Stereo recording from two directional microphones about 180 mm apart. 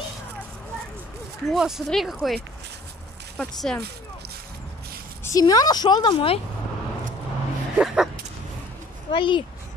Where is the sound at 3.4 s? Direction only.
5° left (ahead or behind).